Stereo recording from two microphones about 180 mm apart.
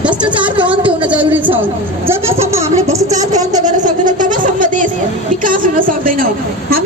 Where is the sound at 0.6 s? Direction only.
10° right (ahead or behind).